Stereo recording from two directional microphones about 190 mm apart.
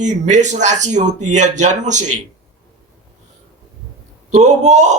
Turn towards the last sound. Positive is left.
turn(degrees=-40)  # may be behind; listen again after turning